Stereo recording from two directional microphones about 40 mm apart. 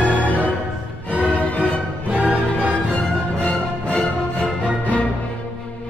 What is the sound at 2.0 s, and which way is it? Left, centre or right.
Music, right.